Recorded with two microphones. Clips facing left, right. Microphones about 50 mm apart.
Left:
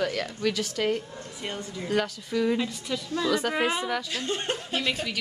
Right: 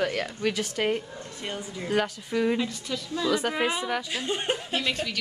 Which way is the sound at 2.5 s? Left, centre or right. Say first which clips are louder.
Even; centre.